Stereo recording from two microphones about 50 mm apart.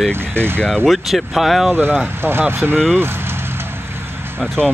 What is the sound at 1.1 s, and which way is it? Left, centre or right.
Speech, centre.